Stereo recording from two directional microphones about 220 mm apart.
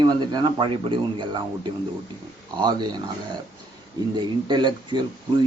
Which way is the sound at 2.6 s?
20° right (ahead or behind).